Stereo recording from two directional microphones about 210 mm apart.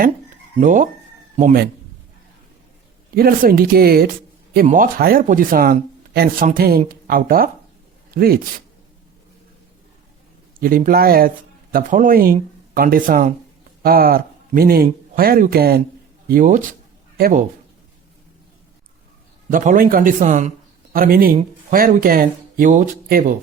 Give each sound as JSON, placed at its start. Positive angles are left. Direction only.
{"t": 0.5, "sound": "speech", "side_deg": -35}
{"t": 3.2, "sound": "a man's voice", "side_deg": -45}
{"t": 10.6, "sound": "speech", "side_deg": -40}
{"t": 19.5, "sound": "speech", "side_deg": -40}